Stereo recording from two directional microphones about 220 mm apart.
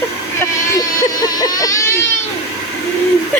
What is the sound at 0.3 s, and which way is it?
Baby cry, 15° left (ahead or behind).